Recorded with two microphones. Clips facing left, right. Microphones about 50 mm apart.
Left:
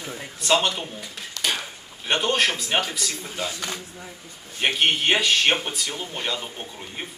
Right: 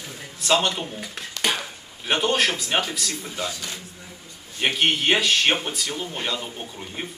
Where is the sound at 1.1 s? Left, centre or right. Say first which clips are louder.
Right 2 dB; right.